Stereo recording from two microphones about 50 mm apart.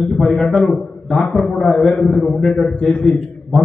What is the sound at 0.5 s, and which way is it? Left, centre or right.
A man's voice, centre.